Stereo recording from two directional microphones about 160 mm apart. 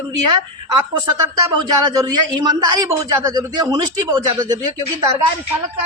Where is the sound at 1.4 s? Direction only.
25° right (ahead or behind).